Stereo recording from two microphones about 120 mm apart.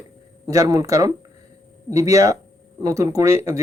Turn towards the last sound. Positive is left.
turn(degrees=-25)  # may be behind; listen again after turning